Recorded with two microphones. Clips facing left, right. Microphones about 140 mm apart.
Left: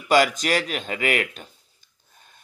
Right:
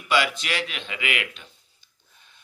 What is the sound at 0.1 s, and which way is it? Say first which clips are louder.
A man's voice: left 5 dB; 40° left (ahead or behind).